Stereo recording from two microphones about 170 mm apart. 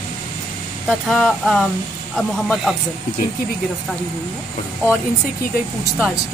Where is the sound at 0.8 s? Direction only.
5° left (ahead or behind).